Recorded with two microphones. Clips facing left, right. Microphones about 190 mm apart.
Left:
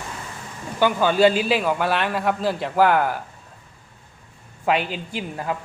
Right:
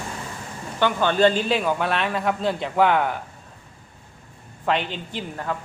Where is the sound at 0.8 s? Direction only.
5° left (ahead or behind).